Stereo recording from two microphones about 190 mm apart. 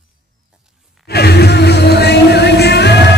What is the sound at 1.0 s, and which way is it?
Music, 60° left (ahead or behind).